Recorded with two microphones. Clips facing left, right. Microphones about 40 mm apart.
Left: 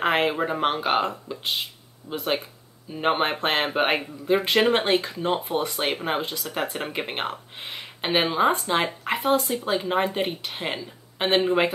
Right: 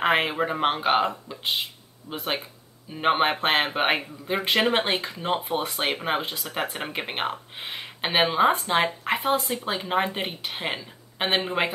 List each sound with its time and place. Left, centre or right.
0.0 s speech: centre
2.9 s speech: centre